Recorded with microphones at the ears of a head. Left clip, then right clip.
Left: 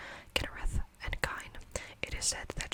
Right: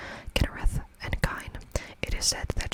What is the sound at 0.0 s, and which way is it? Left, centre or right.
Whispering, right.